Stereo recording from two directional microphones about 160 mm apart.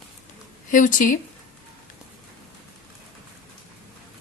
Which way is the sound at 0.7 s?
55° left (ahead or behind).